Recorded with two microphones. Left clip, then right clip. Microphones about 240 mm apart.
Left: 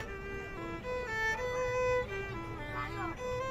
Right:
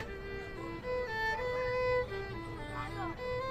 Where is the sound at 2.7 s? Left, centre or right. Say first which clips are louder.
Left 2 dB; left.